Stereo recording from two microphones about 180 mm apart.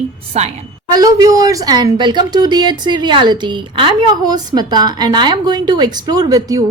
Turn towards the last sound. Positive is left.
turn(degrees=-20)  # may be behind; listen again after turning